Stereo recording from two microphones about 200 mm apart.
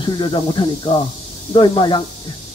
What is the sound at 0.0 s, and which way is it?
Speech, 25° left (ahead or behind).